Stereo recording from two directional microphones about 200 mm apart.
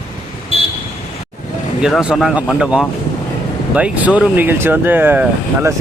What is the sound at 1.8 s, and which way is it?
Speech, 5° right (ahead or behind).